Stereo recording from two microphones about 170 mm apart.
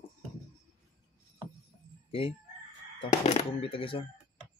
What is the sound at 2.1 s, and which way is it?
Chicken, 30° left (ahead or behind).